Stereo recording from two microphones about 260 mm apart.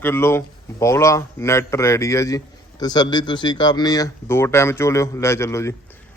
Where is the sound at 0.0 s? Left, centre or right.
Centre.